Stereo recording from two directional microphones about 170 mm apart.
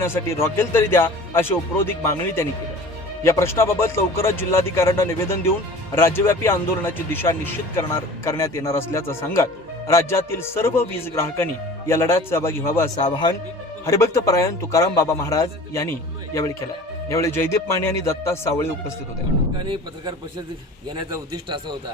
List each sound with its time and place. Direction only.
0.0 s a man's voice: 15° left (ahead or behind)
13.0 s speech: 30° left (ahead or behind)
13.8 s a man's voice: 20° left (ahead or behind)
19.5 s speech: 25° right (ahead or behind)